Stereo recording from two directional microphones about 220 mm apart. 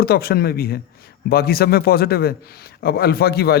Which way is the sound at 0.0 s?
45° left (ahead or behind).